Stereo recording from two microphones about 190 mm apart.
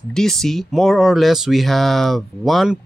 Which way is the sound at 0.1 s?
Centre (ahead or behind).